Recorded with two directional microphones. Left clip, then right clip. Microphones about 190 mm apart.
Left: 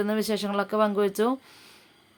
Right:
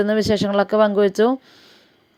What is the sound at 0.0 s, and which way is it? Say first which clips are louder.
A woman's voice: right 9 dB; 30° right (ahead or behind).